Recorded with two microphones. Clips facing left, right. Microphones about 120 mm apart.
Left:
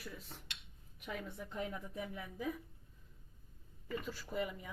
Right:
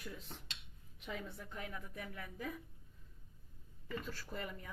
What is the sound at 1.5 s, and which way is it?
A woman's voice, 20° left (ahead or behind).